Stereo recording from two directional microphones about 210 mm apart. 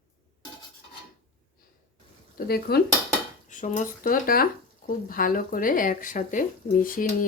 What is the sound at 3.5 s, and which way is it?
Speech, 35° left (ahead or behind).